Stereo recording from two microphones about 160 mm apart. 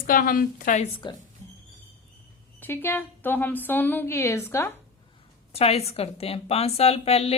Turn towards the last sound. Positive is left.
turn(degrees=40)  # may be behind; listen again after turning